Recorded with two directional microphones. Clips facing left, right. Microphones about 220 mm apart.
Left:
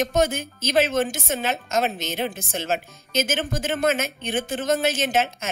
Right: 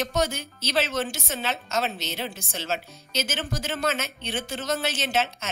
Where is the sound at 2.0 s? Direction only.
50° left (ahead or behind).